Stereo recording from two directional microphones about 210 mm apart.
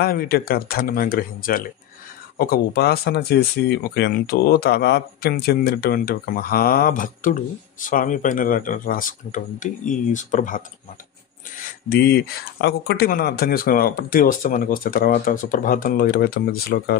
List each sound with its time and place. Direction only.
0.0 s speech: 45° left (ahead or behind)